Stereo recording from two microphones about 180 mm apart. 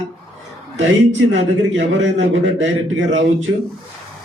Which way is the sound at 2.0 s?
90° right.